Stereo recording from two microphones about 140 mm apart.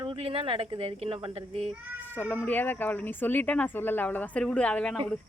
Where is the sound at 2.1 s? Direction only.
15° left (ahead or behind).